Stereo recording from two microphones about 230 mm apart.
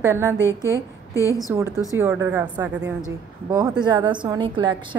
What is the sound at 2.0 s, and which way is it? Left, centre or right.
A woman's voice, centre.